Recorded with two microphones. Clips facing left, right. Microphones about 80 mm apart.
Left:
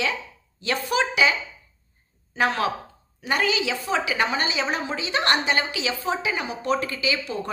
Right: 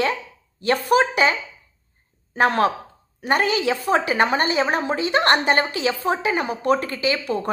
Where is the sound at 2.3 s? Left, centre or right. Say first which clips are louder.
Right 5 dB; right.